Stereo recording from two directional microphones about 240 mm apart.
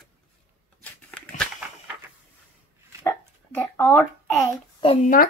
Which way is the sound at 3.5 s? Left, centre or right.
Centre.